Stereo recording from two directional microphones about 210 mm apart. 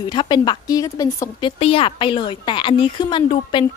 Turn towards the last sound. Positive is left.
turn(degrees=25)  # may be behind; listen again after turning